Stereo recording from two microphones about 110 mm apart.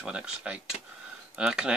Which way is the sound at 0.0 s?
10° right (ahead or behind).